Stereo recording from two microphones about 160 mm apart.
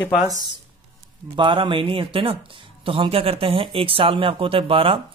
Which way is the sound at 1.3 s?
30° right (ahead or behind).